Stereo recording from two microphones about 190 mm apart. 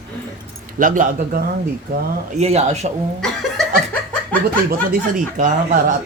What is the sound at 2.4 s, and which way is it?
Speech, 35° right (ahead or behind).